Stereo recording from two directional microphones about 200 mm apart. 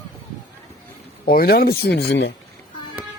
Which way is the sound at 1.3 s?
50° left (ahead or behind).